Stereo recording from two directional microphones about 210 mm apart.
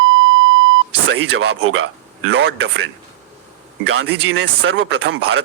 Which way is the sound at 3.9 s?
70° right (ahead or behind).